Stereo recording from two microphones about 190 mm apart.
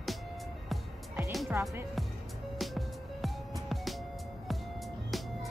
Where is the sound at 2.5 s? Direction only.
Centre (ahead or behind).